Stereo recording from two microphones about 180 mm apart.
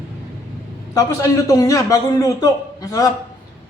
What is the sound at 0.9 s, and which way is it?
A man's voice, 20° left (ahead or behind).